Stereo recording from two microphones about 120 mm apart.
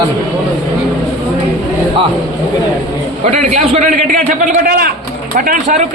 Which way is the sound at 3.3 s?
75° right (ahead or behind).